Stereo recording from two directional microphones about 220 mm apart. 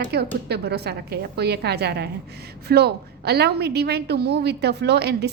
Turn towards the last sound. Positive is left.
turn(degrees=-50)  # may be behind; listen again after turning